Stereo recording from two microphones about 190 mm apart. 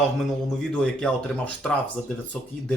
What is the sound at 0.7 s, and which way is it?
Speech, 5° left (ahead or behind).